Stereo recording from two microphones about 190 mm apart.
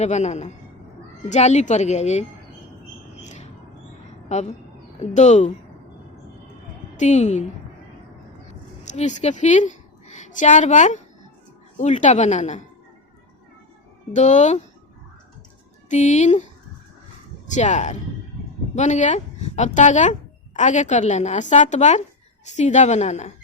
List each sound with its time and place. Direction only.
0.0 s speech: 35° left (ahead or behind)
3.2 s music: 40° left (ahead or behind)
4.3 s a woman's voice: 35° left (ahead or behind)
6.9 s speech: 40° left (ahead or behind)
8.8 s a woman's voice: 40° left (ahead or behind)
14.1 s speech: 40° left (ahead or behind)
15.9 s speech: 40° left (ahead or behind)
17.5 s speech: 40° left (ahead or behind)